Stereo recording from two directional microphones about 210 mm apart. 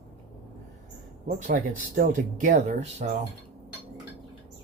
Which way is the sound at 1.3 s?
40° right (ahead or behind).